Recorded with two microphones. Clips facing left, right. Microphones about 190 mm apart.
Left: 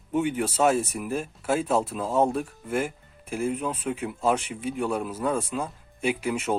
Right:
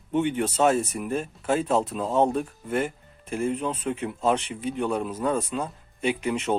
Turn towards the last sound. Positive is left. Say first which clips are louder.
# right 1 dB
turn(degrees=5)  # may be behind; listen again after turning